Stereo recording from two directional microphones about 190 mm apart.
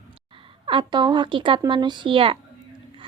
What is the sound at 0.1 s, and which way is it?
Speech, 30° right (ahead or behind).